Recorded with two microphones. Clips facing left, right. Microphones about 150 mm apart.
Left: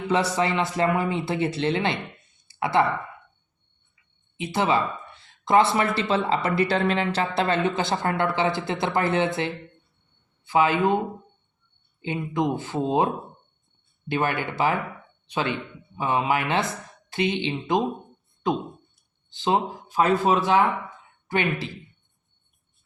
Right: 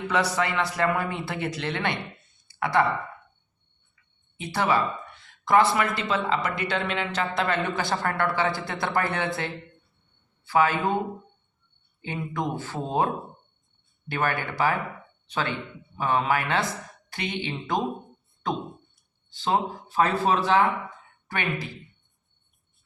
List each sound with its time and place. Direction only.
0.1 s speech: 25° left (ahead or behind)
2.5 s a sound: 25° left (ahead or behind)
4.4 s speech: 20° left (ahead or behind)
12.0 s speech: 20° left (ahead or behind)
14.1 s speech: 20° left (ahead or behind)
19.3 s speech: 20° left (ahead or behind)